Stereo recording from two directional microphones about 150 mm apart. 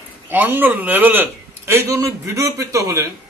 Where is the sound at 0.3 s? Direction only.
15° right (ahead or behind).